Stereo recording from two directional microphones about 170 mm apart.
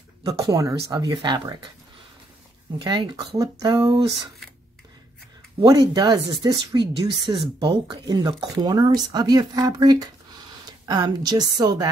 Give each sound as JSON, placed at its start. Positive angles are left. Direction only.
{"t": 0.2, "sound": "speech", "side_deg": -20}
{"t": 2.8, "sound": "speech", "side_deg": -25}
{"t": 5.6, "sound": "speech", "side_deg": -25}